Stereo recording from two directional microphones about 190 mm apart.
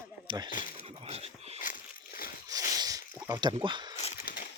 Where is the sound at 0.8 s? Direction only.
30° right (ahead or behind).